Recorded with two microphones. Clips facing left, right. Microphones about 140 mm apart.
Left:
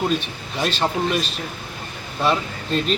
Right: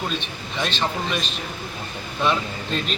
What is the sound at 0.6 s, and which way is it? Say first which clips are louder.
Speech: left 3 dB; 40° left (ahead or behind).